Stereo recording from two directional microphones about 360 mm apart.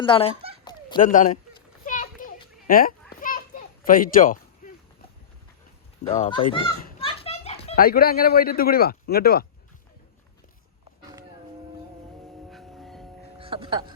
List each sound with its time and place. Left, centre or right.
0.0 s speech: centre
0.6 s a sound: centre
1.8 s children playing: left
6.1 s a child's voice: centre
12.5 s music: centre
13.4 s a sound: centre